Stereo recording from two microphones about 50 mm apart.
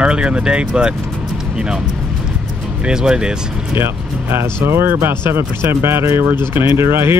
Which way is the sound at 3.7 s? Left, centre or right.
Right.